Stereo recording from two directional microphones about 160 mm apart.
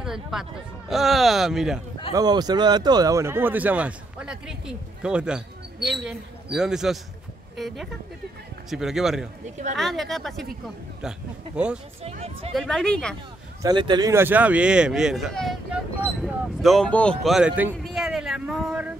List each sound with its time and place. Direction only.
0.0 s speech: 5° right (ahead or behind)
2.1 s speech: 25° right (ahead or behind); by 11.8 s 5° right (ahead or behind)
12.0 s speech: 40° right (ahead or behind)
12.5 s speech: 5° left (ahead or behind)
13.6 s speech: 25° right (ahead or behind)
14.1 s speech: 10° right (ahead or behind)